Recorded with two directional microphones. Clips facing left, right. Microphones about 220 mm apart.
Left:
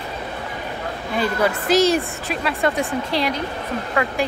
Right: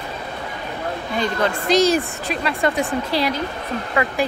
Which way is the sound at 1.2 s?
5° left (ahead or behind).